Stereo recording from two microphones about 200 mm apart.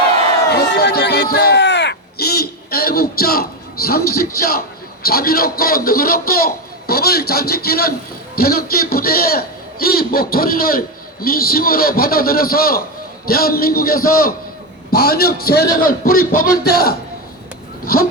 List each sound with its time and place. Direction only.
0.5 s a man's voice: 55° left (ahead or behind)